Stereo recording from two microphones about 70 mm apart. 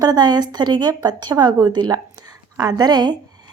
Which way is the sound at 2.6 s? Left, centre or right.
Right.